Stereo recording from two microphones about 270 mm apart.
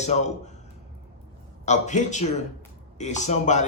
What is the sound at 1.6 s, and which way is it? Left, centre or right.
A man's voice, left.